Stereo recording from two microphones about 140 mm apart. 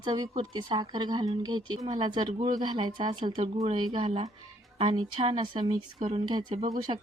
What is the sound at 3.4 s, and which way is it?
Speech, 50° right (ahead or behind).